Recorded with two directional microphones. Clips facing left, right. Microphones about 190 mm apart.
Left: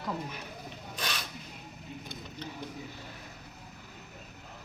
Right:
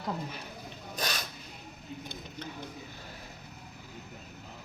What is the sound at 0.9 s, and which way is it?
Filing, 40° right (ahead or behind).